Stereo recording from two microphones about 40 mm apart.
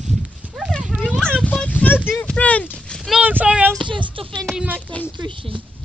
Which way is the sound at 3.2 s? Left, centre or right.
Right.